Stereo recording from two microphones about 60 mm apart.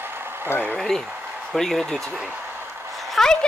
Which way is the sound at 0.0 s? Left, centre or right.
Right.